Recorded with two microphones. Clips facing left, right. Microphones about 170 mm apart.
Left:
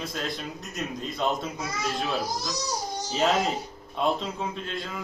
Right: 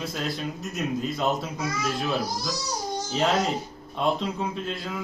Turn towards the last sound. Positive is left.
turn(degrees=0)  # may be behind; listen again after turning